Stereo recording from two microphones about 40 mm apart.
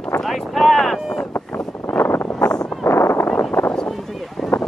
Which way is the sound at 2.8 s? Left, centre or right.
Left.